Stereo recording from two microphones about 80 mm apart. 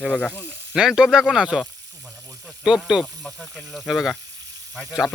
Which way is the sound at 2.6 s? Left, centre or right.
Centre.